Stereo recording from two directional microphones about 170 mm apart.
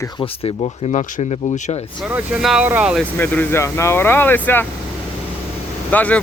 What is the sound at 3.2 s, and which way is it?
Speech, 10° left (ahead or behind).